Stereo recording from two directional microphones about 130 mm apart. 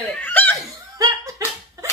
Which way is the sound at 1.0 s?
25° right (ahead or behind).